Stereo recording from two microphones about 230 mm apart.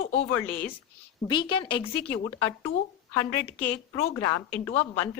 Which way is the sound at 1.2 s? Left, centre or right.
Left.